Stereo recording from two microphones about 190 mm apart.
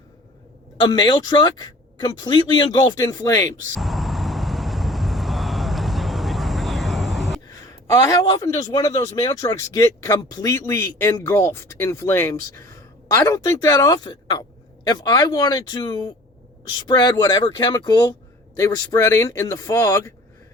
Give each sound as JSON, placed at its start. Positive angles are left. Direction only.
{"t": 0.8, "sound": "speech", "side_deg": 20}
{"t": 3.8, "sound": "vehicle", "side_deg": 0}
{"t": 7.9, "sound": "speech", "side_deg": 15}